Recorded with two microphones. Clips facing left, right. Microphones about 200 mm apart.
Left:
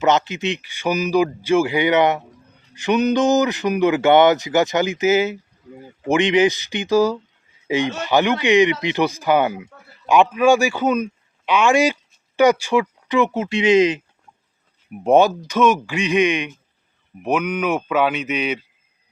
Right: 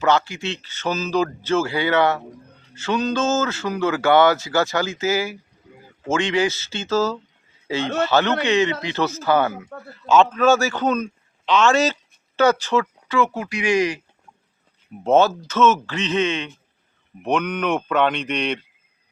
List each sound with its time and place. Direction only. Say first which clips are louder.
0.0 s a man's voice: left 2 dB; 20° left (ahead or behind)
15.0 s a man's voice: left 2 dB; 15° left (ahead or behind)